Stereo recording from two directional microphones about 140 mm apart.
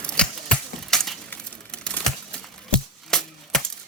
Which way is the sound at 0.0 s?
5° left (ahead or behind).